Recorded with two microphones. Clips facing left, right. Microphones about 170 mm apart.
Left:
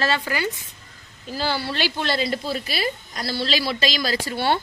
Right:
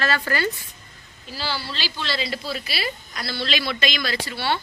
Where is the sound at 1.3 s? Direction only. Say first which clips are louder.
Left 5 dB; 50° left (ahead or behind).